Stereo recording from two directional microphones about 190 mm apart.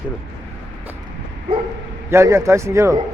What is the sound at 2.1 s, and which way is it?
Speech, 15° right (ahead or behind).